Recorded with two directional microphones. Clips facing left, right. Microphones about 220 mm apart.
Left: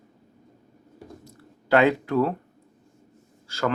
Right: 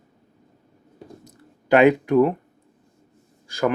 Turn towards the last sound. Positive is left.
turn(degrees=-15)  # may be behind; listen again after turning